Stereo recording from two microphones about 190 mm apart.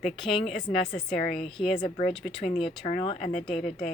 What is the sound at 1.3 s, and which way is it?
Speech, centre (ahead or behind).